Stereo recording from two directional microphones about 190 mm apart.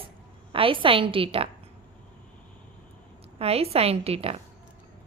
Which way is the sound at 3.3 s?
30° right (ahead or behind).